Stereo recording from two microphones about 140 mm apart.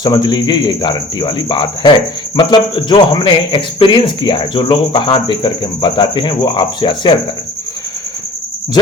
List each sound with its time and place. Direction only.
0.0 s speech: 30° left (ahead or behind)